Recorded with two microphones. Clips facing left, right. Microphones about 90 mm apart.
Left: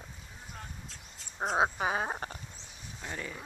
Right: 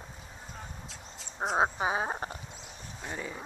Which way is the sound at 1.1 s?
Centre (ahead or behind).